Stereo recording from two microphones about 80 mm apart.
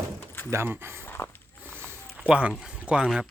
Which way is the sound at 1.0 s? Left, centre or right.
Left.